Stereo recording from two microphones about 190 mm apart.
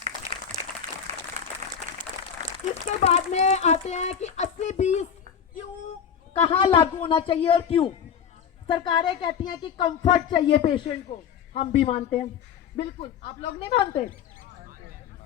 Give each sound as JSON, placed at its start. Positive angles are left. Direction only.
{"t": 0.3, "sound": "applause", "side_deg": -15}
{"t": 0.8, "sound": "a sound", "side_deg": -40}
{"t": 1.4, "sound": "applause", "side_deg": -40}
{"t": 2.4, "sound": "a sound", "side_deg": -40}
{"t": 3.0, "sound": "speech", "side_deg": 35}
{"t": 6.3, "sound": "a man's voice", "side_deg": 30}